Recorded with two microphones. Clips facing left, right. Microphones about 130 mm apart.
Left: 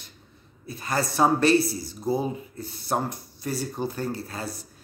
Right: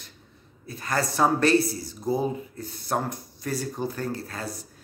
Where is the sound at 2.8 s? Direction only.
25° left (ahead or behind).